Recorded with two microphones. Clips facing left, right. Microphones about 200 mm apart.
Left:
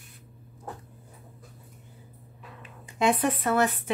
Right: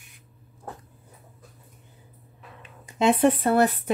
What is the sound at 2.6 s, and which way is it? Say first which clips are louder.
Speech: right 2 dB; 25° right (ahead or behind).